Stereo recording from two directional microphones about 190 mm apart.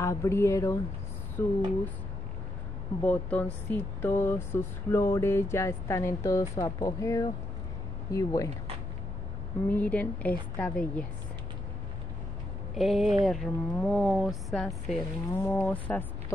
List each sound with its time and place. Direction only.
0.0 s speech: 15° left (ahead or behind)
3.0 s speech: 10° left (ahead or behind)
9.7 s speech: 10° left (ahead or behind)
12.7 s speech: centre (ahead or behind)